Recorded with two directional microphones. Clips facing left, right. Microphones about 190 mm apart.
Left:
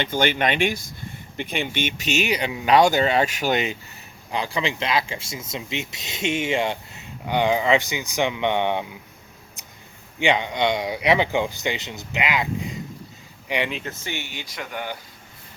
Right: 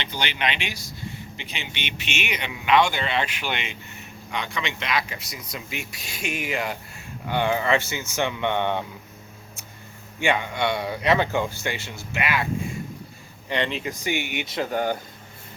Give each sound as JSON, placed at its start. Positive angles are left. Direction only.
{"t": 0.0, "sound": "speech", "side_deg": 50}
{"t": 10.2, "sound": "speech", "side_deg": 20}
{"t": 13.8, "sound": "speech", "side_deg": -15}